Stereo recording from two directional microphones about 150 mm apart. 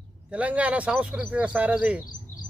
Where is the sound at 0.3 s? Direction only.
10° right (ahead or behind).